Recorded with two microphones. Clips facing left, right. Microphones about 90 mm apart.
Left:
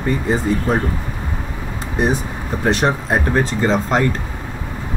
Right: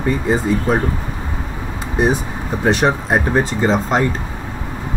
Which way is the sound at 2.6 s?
15° right (ahead or behind).